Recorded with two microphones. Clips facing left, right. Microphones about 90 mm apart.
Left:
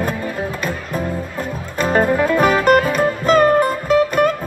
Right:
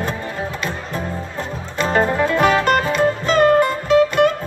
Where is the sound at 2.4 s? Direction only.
10° left (ahead or behind).